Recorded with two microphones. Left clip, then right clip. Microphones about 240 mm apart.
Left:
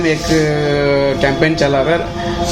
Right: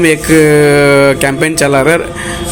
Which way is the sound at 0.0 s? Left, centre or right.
Right.